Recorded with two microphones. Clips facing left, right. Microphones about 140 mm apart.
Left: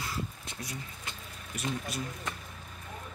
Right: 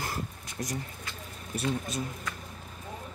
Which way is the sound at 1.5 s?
25° right (ahead or behind).